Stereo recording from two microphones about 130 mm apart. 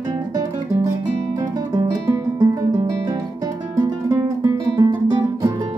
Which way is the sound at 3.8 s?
25° right (ahead or behind).